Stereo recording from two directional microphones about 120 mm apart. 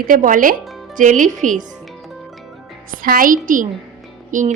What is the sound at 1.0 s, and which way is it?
Speech, 90° right.